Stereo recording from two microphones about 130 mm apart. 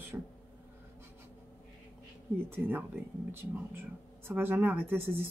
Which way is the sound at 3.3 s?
15° right (ahead or behind).